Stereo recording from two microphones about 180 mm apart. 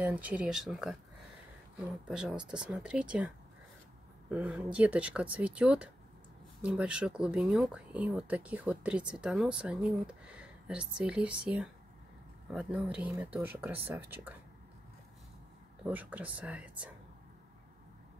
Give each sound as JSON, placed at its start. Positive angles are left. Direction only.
{"t": 0.0, "sound": "speech", "side_deg": -10}
{"t": 15.8, "sound": "speech", "side_deg": -10}